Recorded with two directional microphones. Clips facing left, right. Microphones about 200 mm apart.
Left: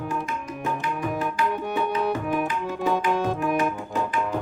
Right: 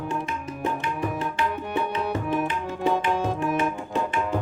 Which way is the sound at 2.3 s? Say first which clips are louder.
Left 1 dB; 25° right (ahead or behind).